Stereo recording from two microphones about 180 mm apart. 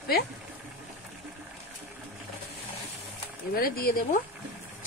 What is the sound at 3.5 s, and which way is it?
Speech, 55° left (ahead or behind).